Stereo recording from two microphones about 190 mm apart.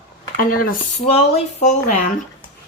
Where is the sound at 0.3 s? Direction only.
50° left (ahead or behind).